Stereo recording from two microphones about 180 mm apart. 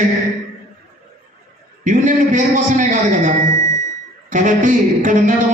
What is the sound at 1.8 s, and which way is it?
Speech, 45° right (ahead or behind).